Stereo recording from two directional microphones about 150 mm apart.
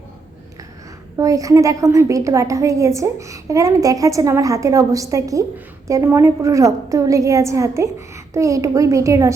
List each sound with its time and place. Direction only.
1.2 s a woman's voice: 20° right (ahead or behind)